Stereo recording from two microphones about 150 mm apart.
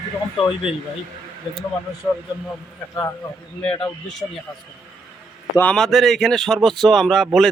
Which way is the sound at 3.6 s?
5° left (ahead or behind).